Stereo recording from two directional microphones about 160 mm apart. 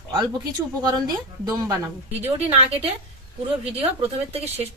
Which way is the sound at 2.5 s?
40° right (ahead or behind).